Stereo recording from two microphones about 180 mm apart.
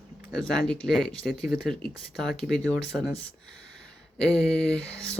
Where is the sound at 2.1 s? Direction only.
Centre (ahead or behind).